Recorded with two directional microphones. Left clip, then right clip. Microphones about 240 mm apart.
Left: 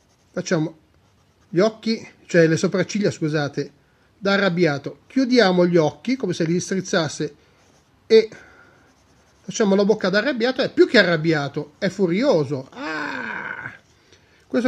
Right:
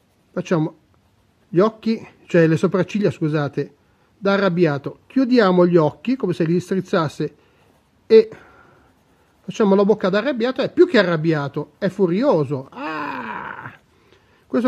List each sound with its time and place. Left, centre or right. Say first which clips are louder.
0.3 s speech: right 1 dB; right
9.6 s speech: right 2 dB; right